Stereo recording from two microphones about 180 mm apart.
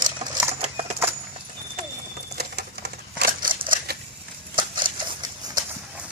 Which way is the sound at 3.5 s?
30° right (ahead or behind).